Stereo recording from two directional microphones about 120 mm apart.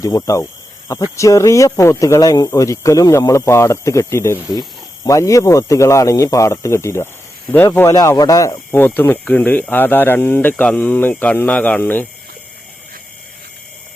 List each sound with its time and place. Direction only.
0.0 s speech: 30° left (ahead or behind)
7.9 s speech: 30° left (ahead or behind)
8.7 s speech: 15° left (ahead or behind)